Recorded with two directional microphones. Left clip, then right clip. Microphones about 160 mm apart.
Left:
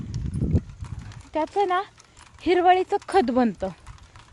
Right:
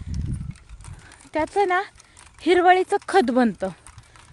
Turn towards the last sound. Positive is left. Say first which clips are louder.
# right 2 dB
turn(degrees=-35)  # may be behind; listen again after turning